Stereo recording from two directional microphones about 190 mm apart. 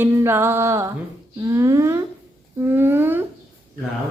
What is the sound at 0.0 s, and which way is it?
Music, 10° right (ahead or behind).